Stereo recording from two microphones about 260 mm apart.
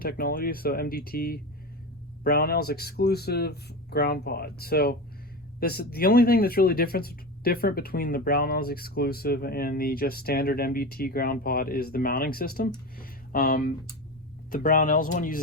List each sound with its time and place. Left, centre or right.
0.0 s speech: left
13.0 s a sound: left
14.5 s speech: left